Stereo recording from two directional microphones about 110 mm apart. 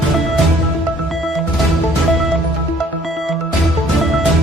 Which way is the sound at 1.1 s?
Centre (ahead or behind).